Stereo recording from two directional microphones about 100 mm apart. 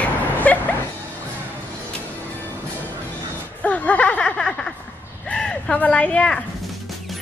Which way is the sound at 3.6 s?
15° left (ahead or behind).